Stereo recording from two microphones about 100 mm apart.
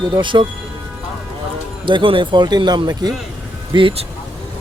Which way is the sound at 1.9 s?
55° right (ahead or behind).